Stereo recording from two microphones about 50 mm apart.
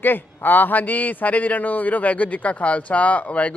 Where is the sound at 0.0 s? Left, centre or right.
Left.